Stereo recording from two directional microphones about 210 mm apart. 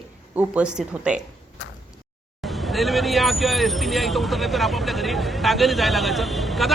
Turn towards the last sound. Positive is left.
turn(degrees=0)  # may be behind; listen again after turning